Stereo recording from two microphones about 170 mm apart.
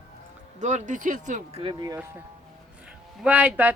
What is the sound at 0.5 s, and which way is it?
Speech, 45° right (ahead or behind).